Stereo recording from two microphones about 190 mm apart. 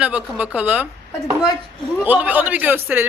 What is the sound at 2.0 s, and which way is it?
Speech, 10° right (ahead or behind).